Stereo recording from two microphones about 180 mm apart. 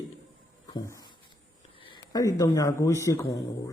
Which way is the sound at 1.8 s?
25° left (ahead or behind).